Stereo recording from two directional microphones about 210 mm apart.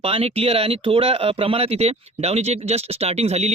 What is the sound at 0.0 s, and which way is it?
Speech, 25° right (ahead or behind).